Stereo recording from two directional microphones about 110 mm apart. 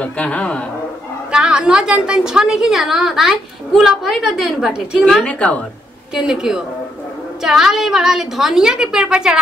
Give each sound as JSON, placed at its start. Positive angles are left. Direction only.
{"t": 0.0, "sound": "a man's voice", "side_deg": 10}
{"t": 1.3, "sound": "a woman's voice", "side_deg": -5}
{"t": 5.0, "sound": "a man's voice", "side_deg": 10}
{"t": 6.1, "sound": "a woman's voice", "side_deg": -5}